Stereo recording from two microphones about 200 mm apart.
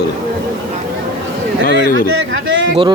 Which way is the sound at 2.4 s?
70° right (ahead or behind).